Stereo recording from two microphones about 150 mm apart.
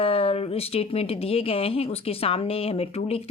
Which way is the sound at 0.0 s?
40° left (ahead or behind).